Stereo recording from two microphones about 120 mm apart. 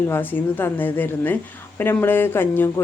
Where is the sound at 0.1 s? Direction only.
15° left (ahead or behind).